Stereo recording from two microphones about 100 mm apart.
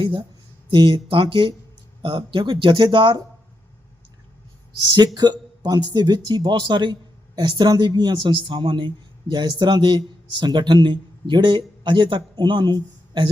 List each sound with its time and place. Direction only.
0.7 s speech: 50° right (ahead or behind)
4.9 s speech: 45° right (ahead or behind)